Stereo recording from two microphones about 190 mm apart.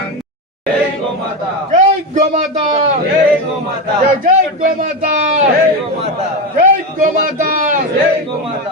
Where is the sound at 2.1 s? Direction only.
35° right (ahead or behind).